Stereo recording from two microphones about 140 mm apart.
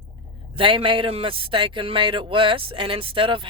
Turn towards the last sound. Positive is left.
turn(degrees=-40)  # may be behind; listen again after turning